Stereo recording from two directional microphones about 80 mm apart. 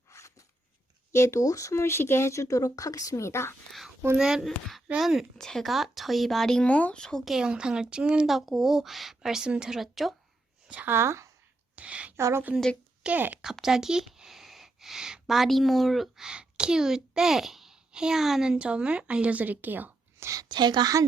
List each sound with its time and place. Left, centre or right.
0.1 s a sound: left
1.1 s speech: left
3.7 s whispering: centre
4.2 s speech: centre
7.3 s speech: centre
10.7 s a woman's voice: centre
10.9 s a woman's voice: right
11.8 s a woman's voice: centre
12.1 s a woman's voice: right
13.0 s speech: centre
13.4 s speech: centre; by 19.9 s right
20.1 s a woman's voice: right
20.4 s a woman's voice: right